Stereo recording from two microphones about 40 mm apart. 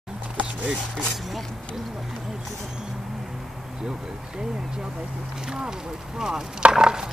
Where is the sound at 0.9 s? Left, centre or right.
Centre.